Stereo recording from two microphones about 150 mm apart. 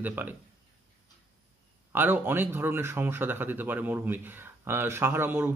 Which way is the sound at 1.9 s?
15° right (ahead or behind).